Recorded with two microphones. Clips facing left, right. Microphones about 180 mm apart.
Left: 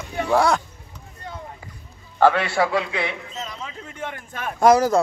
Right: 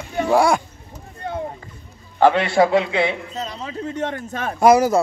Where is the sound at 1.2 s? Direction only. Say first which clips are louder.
Right 9 dB; 60° right (ahead or behind).